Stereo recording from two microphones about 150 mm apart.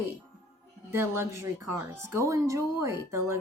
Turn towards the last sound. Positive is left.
turn(degrees=-20)  # may be behind; listen again after turning